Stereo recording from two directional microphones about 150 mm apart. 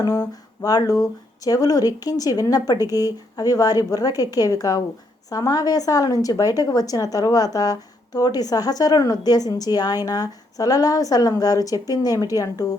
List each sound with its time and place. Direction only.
0.0 s a woman's voice: 20° left (ahead or behind)